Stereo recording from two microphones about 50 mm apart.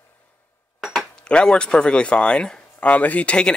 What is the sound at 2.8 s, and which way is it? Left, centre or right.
Speech, left.